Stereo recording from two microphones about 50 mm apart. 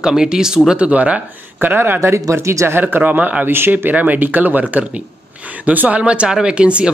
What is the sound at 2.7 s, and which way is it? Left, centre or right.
Speech, right.